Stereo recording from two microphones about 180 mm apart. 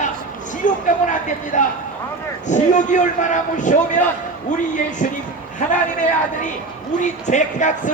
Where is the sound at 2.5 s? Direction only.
45° left (ahead or behind).